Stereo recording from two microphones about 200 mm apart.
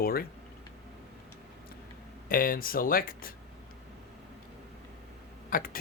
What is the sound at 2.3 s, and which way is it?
Speech, 45° left (ahead or behind).